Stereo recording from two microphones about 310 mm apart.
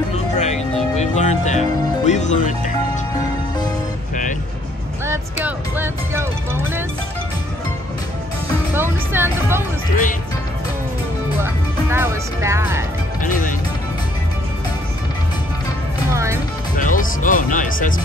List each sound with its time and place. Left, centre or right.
0.1 s music: left
2.0 s speech: left
5.0 s speech: centre
8.7 s speech: centre
11.4 s speech: centre
13.2 s speech: left
16.1 s speech: centre
16.7 s speech: left